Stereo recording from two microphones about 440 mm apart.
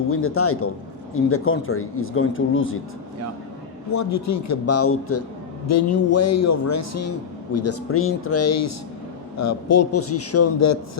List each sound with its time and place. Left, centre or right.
0.1 s speech: left
3.9 s a man's voice: left